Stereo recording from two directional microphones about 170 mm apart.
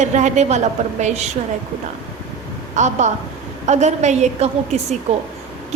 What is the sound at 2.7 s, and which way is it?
A woman's voice, 45° right (ahead or behind).